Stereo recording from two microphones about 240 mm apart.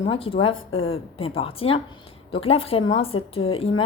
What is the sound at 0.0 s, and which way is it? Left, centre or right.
Speech, left.